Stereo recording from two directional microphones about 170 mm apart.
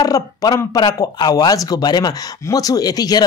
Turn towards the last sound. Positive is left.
turn(degrees=20)  # may be behind; listen again after turning